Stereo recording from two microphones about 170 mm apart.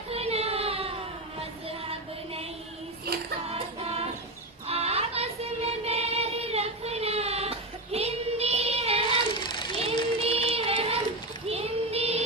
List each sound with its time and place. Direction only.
0.1 s a sound: 35° right (ahead or behind)
1.4 s music: 35° right (ahead or behind)
3.4 s music: 35° right (ahead or behind)
9.3 s children playing: 25° left (ahead or behind)
10.1 s a sound: 35° right (ahead or behind)
11.4 s child singing: 35° right (ahead or behind)